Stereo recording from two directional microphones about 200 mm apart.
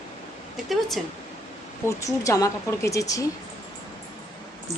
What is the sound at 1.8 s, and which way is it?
Speech, 15° left (ahead or behind).